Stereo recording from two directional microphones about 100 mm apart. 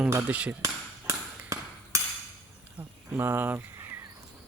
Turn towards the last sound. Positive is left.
turn(degrees=-25)  # may be behind; listen again after turning